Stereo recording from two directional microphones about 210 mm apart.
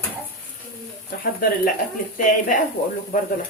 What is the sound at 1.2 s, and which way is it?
A woman's voice, 45° left (ahead or behind).